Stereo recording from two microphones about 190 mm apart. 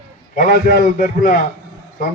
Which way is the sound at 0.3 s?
55° left (ahead or behind).